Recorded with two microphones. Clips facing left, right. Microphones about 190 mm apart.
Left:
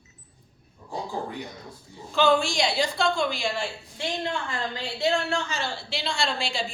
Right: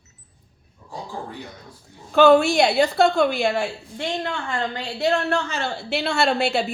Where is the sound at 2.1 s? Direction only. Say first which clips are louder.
Right 8 dB; 60° right (ahead or behind).